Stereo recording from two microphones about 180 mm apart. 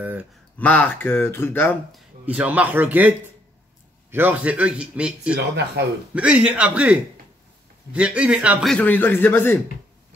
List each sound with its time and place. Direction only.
0.0 s speech: 10° right (ahead or behind)
0.6 s speech: 10° left (ahead or behind)
2.2 s a man's voice: 10° right (ahead or behind)
8.7 s speech: 10° left (ahead or behind)